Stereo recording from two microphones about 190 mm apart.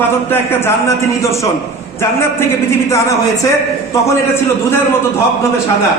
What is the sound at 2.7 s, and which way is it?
Speech, 15° left (ahead or behind).